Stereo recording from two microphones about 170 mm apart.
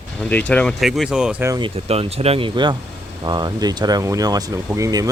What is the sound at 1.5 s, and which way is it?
Speech, 30° right (ahead or behind).